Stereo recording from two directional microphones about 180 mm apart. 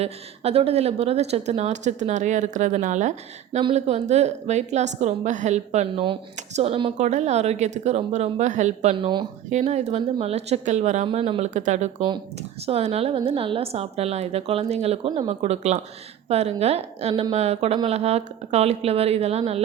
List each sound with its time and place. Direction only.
0.0 s a woman's voice: 35° right (ahead or behind)